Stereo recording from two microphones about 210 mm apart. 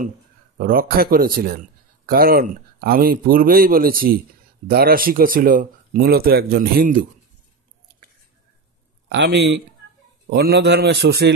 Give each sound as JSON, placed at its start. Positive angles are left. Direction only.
{"t": 0.6, "sound": "a man's voice", "side_deg": -45}
{"t": 9.1, "sound": "a man's voice", "side_deg": -55}